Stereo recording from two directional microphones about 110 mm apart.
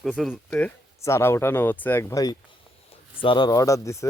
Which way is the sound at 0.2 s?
5° left (ahead or behind).